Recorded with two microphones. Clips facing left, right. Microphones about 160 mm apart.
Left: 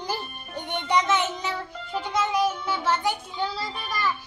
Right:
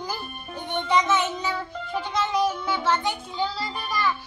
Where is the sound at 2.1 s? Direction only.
10° left (ahead or behind).